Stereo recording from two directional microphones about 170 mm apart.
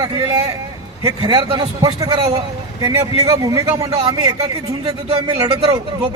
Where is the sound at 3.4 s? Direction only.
25° right (ahead or behind).